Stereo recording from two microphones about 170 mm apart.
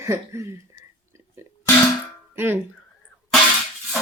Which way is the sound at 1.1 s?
15° right (ahead or behind).